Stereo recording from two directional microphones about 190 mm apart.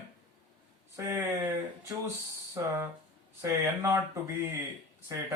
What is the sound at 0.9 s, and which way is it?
Speech, 15° right (ahead or behind).